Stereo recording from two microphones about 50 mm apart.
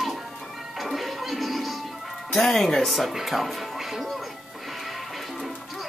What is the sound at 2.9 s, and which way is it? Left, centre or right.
Speech, centre.